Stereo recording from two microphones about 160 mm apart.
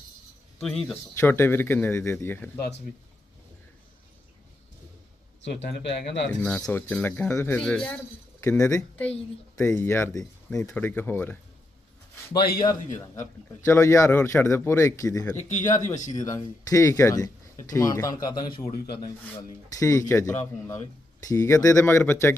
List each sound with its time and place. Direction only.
0.6 s speech: 5° left (ahead or behind)
6.0 s speech: 5° left (ahead or behind)
12.4 s a man's voice: 75° left (ahead or behind)
12.6 s speech: 25° left (ahead or behind)